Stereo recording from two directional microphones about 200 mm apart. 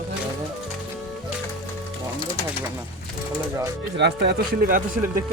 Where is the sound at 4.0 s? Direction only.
55° right (ahead or behind).